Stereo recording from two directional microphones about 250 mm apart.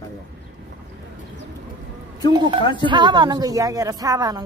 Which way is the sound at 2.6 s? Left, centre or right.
Centre.